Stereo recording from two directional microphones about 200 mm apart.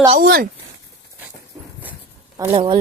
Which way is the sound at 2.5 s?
25° right (ahead or behind).